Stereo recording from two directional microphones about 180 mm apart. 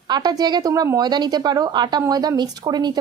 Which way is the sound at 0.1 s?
25° right (ahead or behind).